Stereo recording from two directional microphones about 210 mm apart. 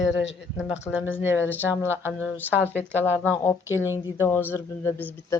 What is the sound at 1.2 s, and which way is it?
Speech, 10° right (ahead or behind).